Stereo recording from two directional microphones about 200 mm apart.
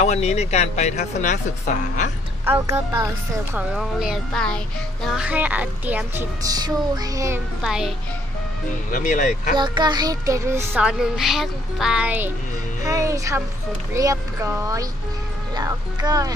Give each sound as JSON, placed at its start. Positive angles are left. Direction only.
{"t": 0.0, "sound": "speech", "side_deg": 35}
{"t": 2.4, "sound": "speech", "side_deg": -15}
{"t": 3.5, "sound": "speech", "side_deg": -5}
{"t": 7.6, "sound": "speech", "side_deg": 0}
{"t": 8.9, "sound": "speech", "side_deg": 40}
{"t": 9.6, "sound": "speech", "side_deg": -20}